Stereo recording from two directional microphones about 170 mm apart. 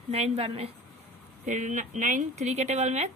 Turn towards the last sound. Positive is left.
turn(degrees=-40)  # may be behind; listen again after turning